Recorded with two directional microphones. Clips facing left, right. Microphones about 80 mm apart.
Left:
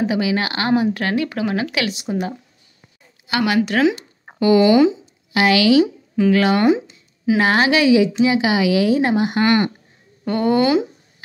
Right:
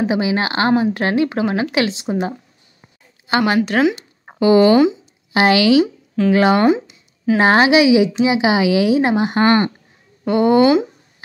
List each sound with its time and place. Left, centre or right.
0.0 s speech: right
7.7 s speech: centre; by 9.7 s right
10.2 s speech: right